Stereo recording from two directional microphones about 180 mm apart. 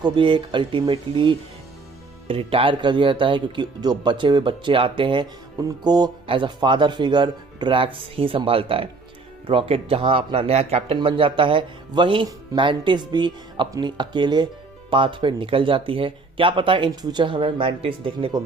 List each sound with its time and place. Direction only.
0.0 s speech: 25° right (ahead or behind)